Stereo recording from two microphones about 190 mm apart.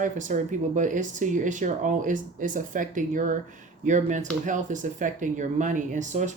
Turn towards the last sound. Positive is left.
turn(degrees=-40)  # may be behind; listen again after turning